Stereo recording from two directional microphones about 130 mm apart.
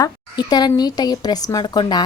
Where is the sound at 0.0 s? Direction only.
30° left (ahead or behind).